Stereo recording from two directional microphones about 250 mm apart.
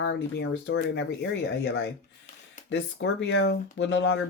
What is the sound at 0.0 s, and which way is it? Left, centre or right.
Speech, left.